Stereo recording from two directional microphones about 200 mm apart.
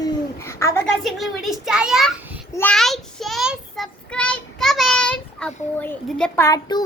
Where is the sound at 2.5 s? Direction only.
5° left (ahead or behind).